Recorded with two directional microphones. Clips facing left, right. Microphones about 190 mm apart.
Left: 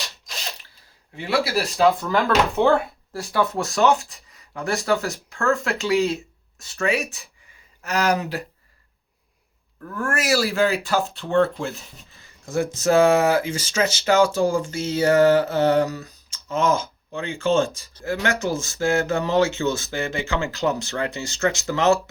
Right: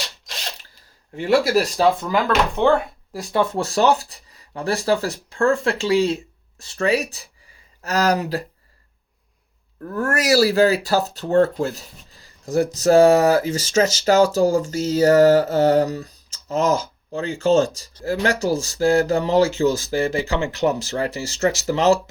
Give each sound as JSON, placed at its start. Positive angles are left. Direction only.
{"t": 1.1, "sound": "speech", "side_deg": -45}
{"t": 2.2, "sound": "speech", "side_deg": 5}
{"t": 3.1, "sound": "speech", "side_deg": -15}
{"t": 3.5, "sound": "speech", "side_deg": -30}
{"t": 9.8, "sound": "speech", "side_deg": -35}